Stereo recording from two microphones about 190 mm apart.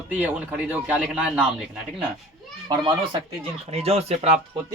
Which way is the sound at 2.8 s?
30° right (ahead or behind).